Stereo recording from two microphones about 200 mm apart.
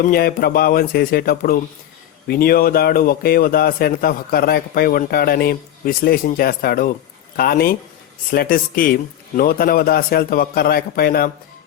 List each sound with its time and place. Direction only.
0.0 s speech: 45° left (ahead or behind)